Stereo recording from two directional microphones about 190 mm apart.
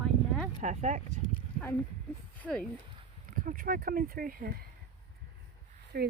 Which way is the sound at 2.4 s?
5° left (ahead or behind).